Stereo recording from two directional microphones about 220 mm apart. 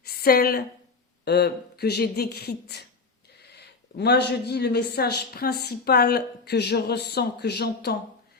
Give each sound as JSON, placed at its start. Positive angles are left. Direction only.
{"t": 0.1, "sound": "a woman's voice", "side_deg": 45}
{"t": 3.9, "sound": "a woman's voice", "side_deg": 50}